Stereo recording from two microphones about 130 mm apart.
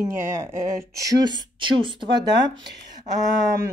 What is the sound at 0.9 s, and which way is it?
Speech, 30° right (ahead or behind).